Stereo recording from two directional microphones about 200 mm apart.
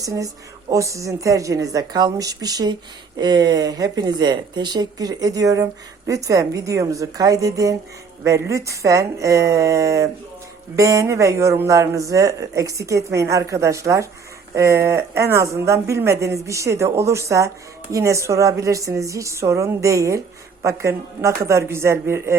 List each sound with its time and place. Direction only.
0.0 s a woman's voice: 15° right (ahead or behind)